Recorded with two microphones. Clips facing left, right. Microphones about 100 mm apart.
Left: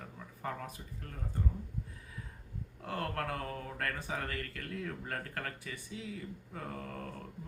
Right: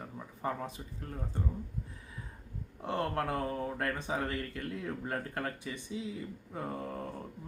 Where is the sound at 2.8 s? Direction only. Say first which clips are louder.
Right 4 dB; 25° right (ahead or behind).